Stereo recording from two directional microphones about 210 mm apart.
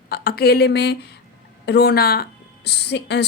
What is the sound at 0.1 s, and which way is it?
A woman's voice, 45° left (ahead or behind).